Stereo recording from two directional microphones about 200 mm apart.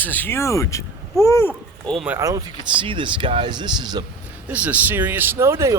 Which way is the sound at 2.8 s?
25° right (ahead or behind).